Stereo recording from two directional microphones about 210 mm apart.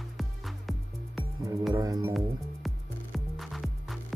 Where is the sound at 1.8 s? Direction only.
15° right (ahead or behind).